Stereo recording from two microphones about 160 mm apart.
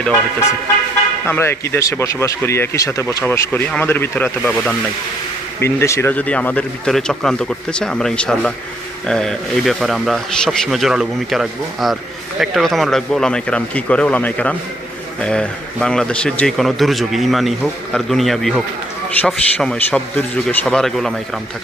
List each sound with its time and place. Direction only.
1.3 s speech: 15° left (ahead or behind)
5.5 s a man's voice: 15° left (ahead or behind)